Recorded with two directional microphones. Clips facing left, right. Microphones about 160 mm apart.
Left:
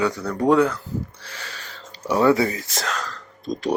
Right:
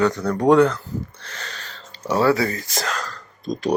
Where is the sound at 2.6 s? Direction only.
Centre (ahead or behind).